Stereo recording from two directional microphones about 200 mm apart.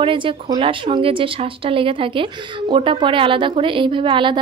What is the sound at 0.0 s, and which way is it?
Speech, 25° right (ahead or behind).